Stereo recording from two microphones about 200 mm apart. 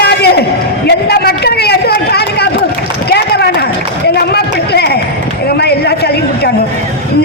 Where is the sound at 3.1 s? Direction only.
55° left (ahead or behind).